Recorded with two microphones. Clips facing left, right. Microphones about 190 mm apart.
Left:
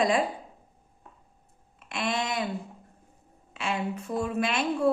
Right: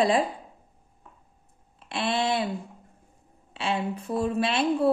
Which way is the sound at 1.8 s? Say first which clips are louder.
Right 3 dB; 30° right (ahead or behind).